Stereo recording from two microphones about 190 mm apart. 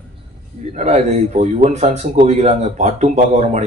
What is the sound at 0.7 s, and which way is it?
Speech, 35° right (ahead or behind).